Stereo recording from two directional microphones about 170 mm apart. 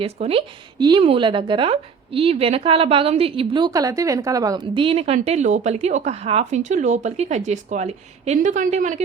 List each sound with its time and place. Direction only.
0.0 s speech: 35° right (ahead or behind)